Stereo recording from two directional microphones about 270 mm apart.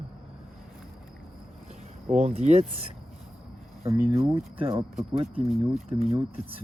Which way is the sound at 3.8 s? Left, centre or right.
Centre.